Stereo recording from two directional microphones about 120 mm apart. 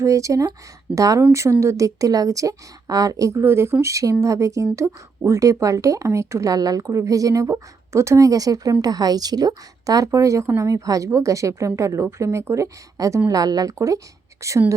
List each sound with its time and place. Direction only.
0.0 s a woman's voice: 25° right (ahead or behind)